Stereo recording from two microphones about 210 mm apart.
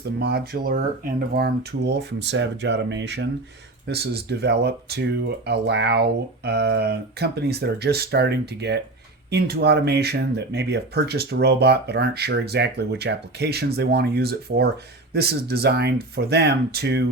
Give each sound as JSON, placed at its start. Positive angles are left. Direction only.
{"t": 0.0, "sound": "speech", "side_deg": -50}